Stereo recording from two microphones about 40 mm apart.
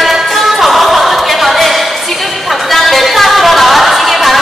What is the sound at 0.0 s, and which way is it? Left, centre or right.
Music, centre.